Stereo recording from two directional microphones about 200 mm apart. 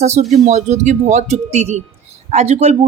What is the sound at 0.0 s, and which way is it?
A woman's voice, 35° right (ahead or behind).